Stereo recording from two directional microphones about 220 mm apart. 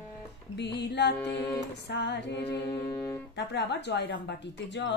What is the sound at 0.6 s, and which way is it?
Music, 50° left (ahead or behind).